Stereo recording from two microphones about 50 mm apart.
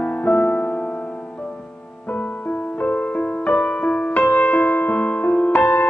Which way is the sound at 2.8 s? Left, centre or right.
Left.